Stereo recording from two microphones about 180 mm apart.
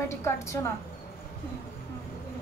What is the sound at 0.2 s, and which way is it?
Speech, 15° left (ahead or behind).